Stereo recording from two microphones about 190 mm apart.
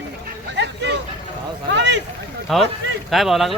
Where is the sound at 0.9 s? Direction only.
65° right (ahead or behind).